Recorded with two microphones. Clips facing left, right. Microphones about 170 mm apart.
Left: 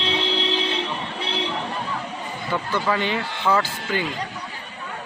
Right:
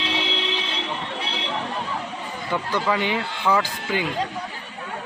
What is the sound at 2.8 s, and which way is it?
Speech, 15° right (ahead or behind).